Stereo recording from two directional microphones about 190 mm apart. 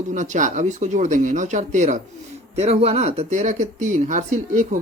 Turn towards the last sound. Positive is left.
turn(degrees=-40)  # may be behind; listen again after turning